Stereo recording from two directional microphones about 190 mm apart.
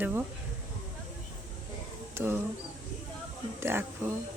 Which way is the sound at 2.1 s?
10° right (ahead or behind).